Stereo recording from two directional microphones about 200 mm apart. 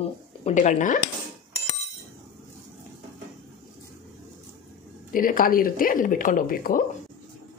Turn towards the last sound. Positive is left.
turn(degrees=45)  # may be behind; listen again after turning